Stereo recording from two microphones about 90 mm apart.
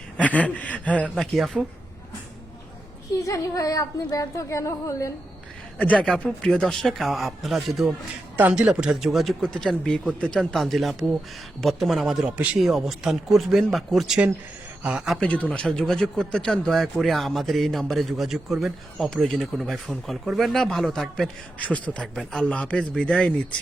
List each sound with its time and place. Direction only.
0.2 s a man's voice: 15° left (ahead or behind)
1.1 s speech: centre (ahead or behind)
3.2 s speech: 40° left (ahead or behind)
6.1 s speech: 10° left (ahead or behind)
8.4 s speech: 15° right (ahead or behind)
15.2 s speech: 15° left (ahead or behind)
21.6 s a man's voice: 15° left (ahead or behind)